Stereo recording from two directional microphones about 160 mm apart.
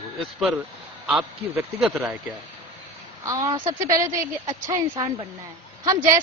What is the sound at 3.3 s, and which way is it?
A woman's voice, 20° right (ahead or behind).